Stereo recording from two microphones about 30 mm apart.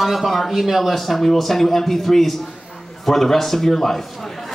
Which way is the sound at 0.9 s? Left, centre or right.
Centre.